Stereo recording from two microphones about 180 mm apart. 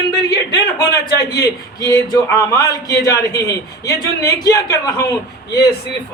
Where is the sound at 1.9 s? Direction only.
20° left (ahead or behind).